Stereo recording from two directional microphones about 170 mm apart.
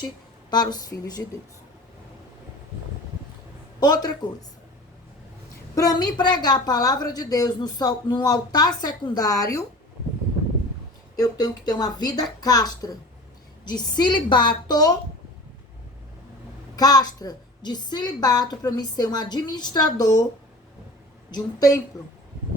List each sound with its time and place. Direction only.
0.5 s a woman's voice: 25° left (ahead or behind)
3.8 s a woman's voice: 25° left (ahead or behind)
5.7 s a woman's voice: 20° left (ahead or behind)
11.2 s a woman's voice: 25° left (ahead or behind)
16.7 s a woman's voice: 20° left (ahead or behind)
21.2 s a woman's voice: 25° left (ahead or behind)